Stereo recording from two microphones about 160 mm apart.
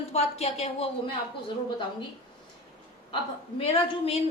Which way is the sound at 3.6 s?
40° left (ahead or behind).